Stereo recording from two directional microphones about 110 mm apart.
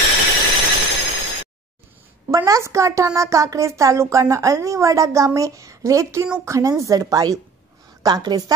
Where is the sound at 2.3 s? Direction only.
30° right (ahead or behind).